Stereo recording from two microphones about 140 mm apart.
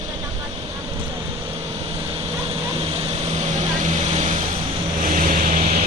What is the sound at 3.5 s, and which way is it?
Vehicle, 55° right (ahead or behind).